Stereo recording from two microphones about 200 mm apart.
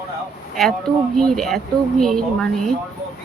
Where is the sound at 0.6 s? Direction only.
Centre (ahead or behind).